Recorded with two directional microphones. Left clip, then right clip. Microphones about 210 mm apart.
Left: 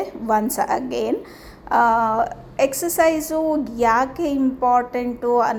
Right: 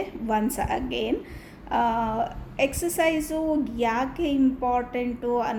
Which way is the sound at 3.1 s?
15° left (ahead or behind).